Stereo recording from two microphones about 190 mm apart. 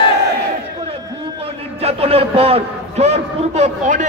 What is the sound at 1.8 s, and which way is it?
A man's voice, 30° right (ahead or behind).